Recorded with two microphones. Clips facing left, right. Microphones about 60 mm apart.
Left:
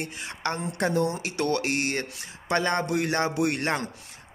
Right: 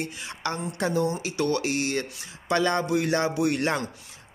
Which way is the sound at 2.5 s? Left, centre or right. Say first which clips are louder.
Right 1 dB; left.